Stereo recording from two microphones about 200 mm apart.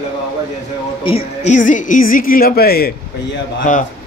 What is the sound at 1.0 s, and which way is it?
A woman's voice, 30° left (ahead or behind).